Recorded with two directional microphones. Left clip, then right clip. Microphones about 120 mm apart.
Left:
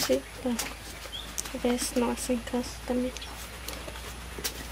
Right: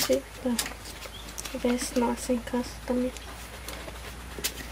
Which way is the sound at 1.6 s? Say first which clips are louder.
Right 1 dB; 5° right (ahead or behind).